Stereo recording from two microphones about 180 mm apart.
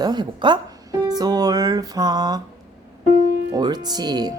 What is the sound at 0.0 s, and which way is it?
Music, 25° right (ahead or behind).